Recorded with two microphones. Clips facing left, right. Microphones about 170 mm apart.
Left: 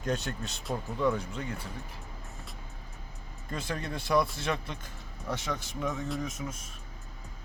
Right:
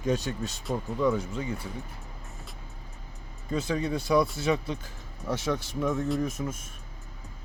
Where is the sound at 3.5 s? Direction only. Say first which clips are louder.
Right 7 dB; centre (ahead or behind).